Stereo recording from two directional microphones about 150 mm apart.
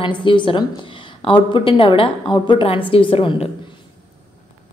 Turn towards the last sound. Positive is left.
turn(degrees=35)  # may be behind; listen again after turning